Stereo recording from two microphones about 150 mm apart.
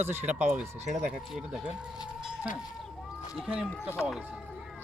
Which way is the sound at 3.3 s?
5° right (ahead or behind).